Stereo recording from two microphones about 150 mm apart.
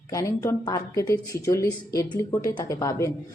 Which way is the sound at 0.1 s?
20° left (ahead or behind).